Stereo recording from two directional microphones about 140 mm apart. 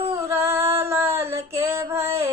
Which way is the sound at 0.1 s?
20° right (ahead or behind).